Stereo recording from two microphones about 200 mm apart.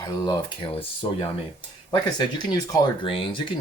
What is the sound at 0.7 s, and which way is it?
Speech, 25° left (ahead or behind).